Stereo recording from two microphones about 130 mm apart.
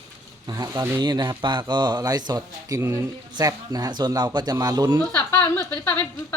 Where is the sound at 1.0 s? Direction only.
35° right (ahead or behind).